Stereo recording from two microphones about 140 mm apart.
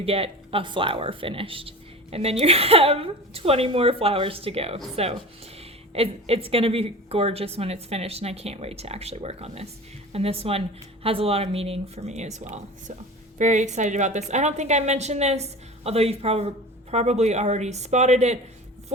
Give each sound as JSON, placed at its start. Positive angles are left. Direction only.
{"t": 0.0, "sound": "a woman's voice", "side_deg": -45}
{"t": 5.9, "sound": "a woman's voice", "side_deg": -45}